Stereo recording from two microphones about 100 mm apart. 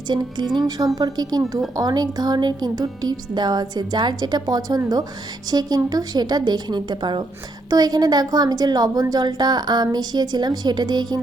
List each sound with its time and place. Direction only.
0.1 s a woman's voice: 45° right (ahead or behind)